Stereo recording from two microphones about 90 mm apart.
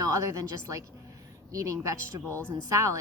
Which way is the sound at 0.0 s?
35° right (ahead or behind).